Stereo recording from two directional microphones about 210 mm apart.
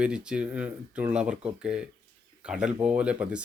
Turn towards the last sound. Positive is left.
turn(degrees=-5)  # may be behind; listen again after turning